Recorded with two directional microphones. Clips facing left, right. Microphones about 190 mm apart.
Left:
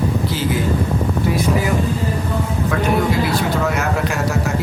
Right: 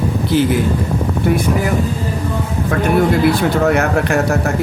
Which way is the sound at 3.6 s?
60° right (ahead or behind).